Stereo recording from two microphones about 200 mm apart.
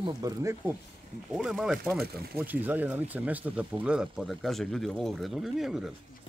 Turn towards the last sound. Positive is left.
turn(degrees=0)  # may be behind; listen again after turning